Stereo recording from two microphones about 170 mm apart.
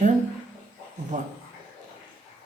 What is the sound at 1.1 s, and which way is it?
Speech, 50° right (ahead or behind).